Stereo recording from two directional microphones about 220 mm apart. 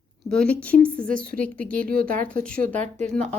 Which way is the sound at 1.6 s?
40° right (ahead or behind).